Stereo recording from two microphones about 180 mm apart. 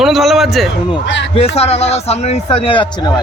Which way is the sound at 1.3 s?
35° left (ahead or behind).